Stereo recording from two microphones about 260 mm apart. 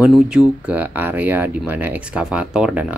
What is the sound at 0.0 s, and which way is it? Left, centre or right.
Speech, centre.